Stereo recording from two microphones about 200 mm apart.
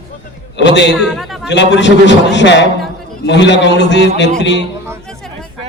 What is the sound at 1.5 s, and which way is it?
A man's voice, 60° left (ahead or behind).